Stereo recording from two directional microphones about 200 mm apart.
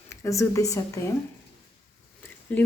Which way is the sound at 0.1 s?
15° left (ahead or behind).